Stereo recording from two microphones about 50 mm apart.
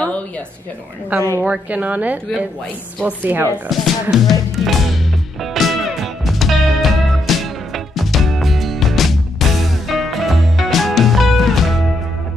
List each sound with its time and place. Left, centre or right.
1.1 s a woman's voice: right
3.6 s speech: centre
5.4 s music: centre